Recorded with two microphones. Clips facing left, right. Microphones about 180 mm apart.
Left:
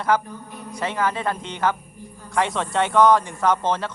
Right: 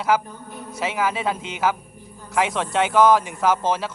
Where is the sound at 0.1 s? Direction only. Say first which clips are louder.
Even; 5° right (ahead or behind).